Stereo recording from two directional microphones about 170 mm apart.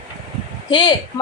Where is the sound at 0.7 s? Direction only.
25° left (ahead or behind).